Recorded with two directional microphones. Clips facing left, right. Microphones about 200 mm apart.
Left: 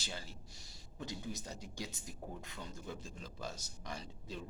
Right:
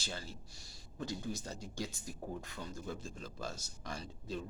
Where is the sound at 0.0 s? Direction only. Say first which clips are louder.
Right 2 dB; 15° left (ahead or behind).